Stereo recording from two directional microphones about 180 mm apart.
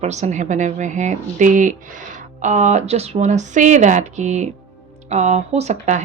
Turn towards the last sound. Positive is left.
turn(degrees=-40)  # may be behind; listen again after turning